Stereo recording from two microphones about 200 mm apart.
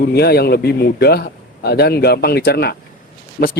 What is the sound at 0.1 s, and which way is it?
Speech, 55° left (ahead or behind).